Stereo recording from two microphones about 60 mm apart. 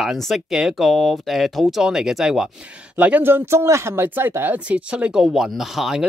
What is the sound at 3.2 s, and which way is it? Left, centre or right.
Speech, right.